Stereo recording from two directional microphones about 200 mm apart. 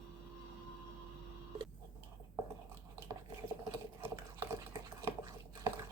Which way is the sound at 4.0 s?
10° right (ahead or behind).